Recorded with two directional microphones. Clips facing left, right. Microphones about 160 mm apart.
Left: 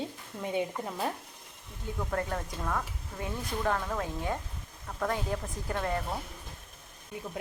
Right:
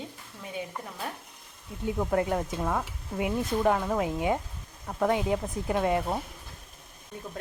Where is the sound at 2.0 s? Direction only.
20° right (ahead or behind).